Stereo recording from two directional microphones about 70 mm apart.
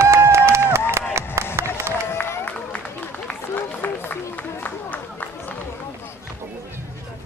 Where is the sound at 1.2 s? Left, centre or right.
Right.